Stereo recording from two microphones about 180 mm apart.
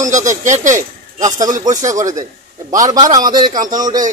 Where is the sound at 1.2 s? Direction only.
20° right (ahead or behind).